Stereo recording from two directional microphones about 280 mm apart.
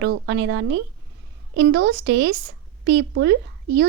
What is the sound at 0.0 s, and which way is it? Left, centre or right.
A woman's voice, right.